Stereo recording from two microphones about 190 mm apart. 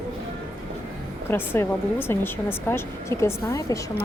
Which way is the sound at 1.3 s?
10° left (ahead or behind).